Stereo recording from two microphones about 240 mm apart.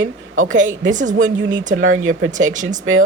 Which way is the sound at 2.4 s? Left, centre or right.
Right.